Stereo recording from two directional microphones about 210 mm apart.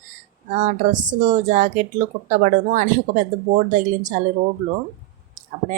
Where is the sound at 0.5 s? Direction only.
40° right (ahead or behind).